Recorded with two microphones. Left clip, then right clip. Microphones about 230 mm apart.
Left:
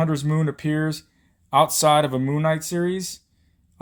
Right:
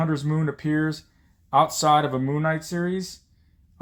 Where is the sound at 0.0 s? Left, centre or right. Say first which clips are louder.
Left 2 dB; left.